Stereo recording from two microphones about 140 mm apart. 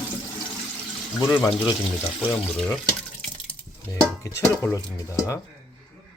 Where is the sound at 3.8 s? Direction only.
20° left (ahead or behind).